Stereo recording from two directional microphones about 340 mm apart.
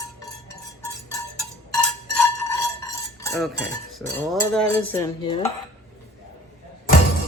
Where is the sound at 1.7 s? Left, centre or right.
Centre.